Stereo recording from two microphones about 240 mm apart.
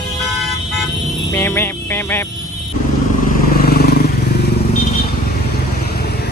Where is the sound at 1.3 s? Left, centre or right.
Centre.